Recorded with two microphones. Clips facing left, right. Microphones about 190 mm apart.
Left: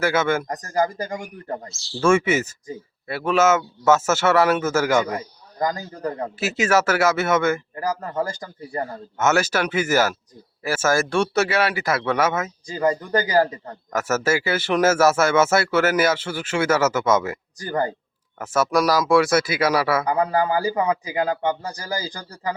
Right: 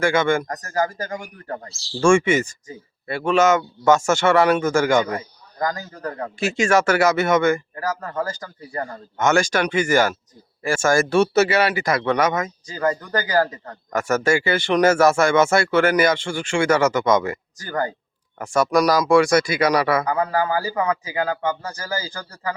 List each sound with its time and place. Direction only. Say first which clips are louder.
0.0 s speech: right 2 dB; 5° left (ahead or behind)
0.4 s speech: left 1 dB; 15° left (ahead or behind)
2.0 s speech: right 2 dB; 5° left (ahead or behind)
5.5 s speech: left 1 dB; 15° left (ahead or behind)
6.4 s speech: right 2 dB; 5° left (ahead or behind)
7.8 s speech: left 1 dB; 15° left (ahead or behind)
20.1 s speech: left 1 dB; 15° left (ahead or behind)